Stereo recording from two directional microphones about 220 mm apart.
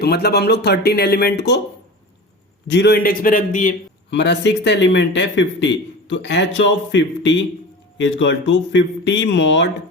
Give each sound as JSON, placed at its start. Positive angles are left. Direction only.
{"t": 0.0, "sound": "a man's voice", "side_deg": 45}
{"t": 2.6, "sound": "a man's voice", "side_deg": 50}
{"t": 4.1, "sound": "a man's voice", "side_deg": 50}